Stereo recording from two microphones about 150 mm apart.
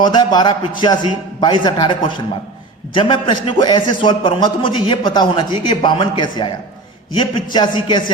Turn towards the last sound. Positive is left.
turn(degrees=30)  # may be behind; listen again after turning